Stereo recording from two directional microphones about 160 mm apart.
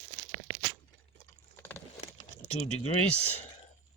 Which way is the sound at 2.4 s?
40° left (ahead or behind).